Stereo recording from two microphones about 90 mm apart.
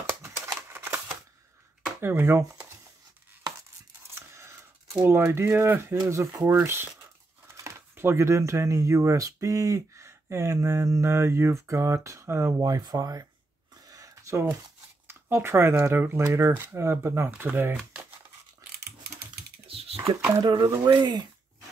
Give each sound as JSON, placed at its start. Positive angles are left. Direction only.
{"t": 0.0, "sound": "typewriter", "side_deg": -25}
{"t": 2.0, "sound": "speech", "side_deg": -25}
{"t": 4.1, "sound": "scissors", "side_deg": -30}
{"t": 4.9, "sound": "speech", "side_deg": -25}
{"t": 12.6, "sound": "speech", "side_deg": -45}
{"t": 13.8, "sound": "a sound", "side_deg": -40}
{"t": 15.0, "sound": "speech", "side_deg": -25}
{"t": 19.7, "sound": "a sound", "side_deg": -90}
{"t": 20.0, "sound": "speech", "side_deg": -35}
{"t": 20.4, "sound": "speech", "side_deg": -55}